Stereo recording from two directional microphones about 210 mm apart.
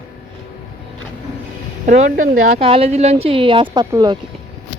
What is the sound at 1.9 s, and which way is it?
Speech, 40° right (ahead or behind).